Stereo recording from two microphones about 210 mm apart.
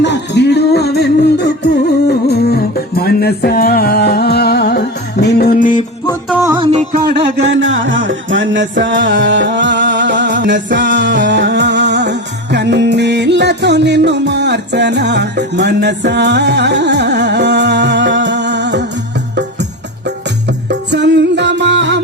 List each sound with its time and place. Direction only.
0.0 s music: 55° left (ahead or behind); by 5.8 s 40° left (ahead or behind)
6.6 s music: 20° right (ahead or behind)
7.4 s music: 60° right (ahead or behind)
20.1 s music: 55° right (ahead or behind)